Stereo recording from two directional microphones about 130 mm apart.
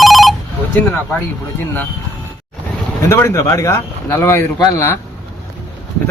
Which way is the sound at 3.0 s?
20° left (ahead or behind).